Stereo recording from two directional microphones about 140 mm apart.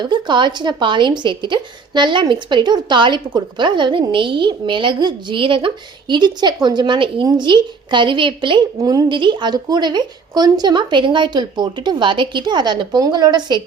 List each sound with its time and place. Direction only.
0.0 s a woman's voice: 35° right (ahead or behind)